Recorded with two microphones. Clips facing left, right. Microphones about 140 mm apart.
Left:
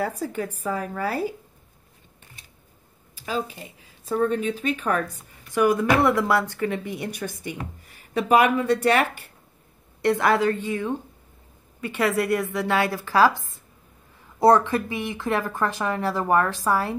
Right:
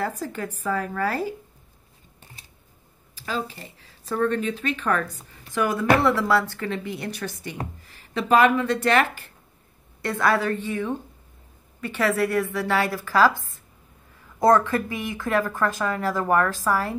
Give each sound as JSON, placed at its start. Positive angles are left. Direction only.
{"t": 0.0, "sound": "speech", "side_deg": 10}
{"t": 3.3, "sound": "a woman's voice", "side_deg": 5}
{"t": 10.0, "sound": "a woman's voice", "side_deg": 20}
{"t": 11.8, "sound": "speech", "side_deg": 15}
{"t": 14.4, "sound": "speech", "side_deg": 20}